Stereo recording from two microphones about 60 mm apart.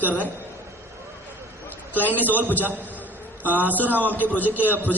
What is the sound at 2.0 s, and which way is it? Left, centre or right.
Speech, left.